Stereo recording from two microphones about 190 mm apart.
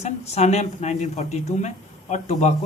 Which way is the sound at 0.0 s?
35° left (ahead or behind).